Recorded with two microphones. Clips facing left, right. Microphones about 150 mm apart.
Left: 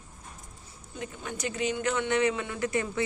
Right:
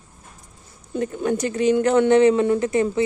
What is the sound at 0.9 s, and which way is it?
Speech, 50° right (ahead or behind).